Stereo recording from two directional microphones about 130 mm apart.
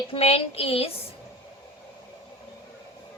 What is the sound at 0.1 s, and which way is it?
Speech, 50° left (ahead or behind).